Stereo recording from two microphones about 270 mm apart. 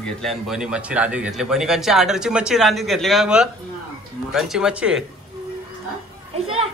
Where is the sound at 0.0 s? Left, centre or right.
Centre.